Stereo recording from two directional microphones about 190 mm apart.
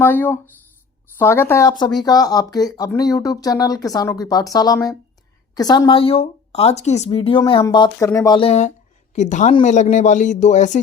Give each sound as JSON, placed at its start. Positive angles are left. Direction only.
{"t": 0.0, "sound": "speech", "side_deg": 10}
{"t": 8.4, "sound": "speech", "side_deg": 35}